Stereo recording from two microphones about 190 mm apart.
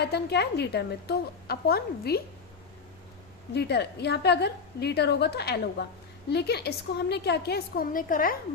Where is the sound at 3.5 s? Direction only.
60° left (ahead or behind).